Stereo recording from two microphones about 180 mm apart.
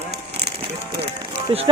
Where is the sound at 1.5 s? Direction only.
30° right (ahead or behind).